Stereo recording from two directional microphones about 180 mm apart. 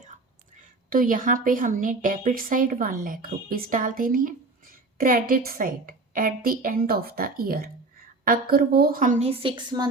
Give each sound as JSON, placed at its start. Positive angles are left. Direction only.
{"t": 0.5, "sound": "a woman's voice", "side_deg": -50}